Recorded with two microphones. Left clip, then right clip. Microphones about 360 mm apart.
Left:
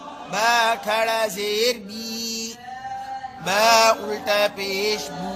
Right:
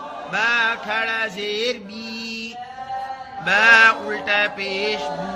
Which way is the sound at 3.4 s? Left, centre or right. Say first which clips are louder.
Right 3 dB; centre.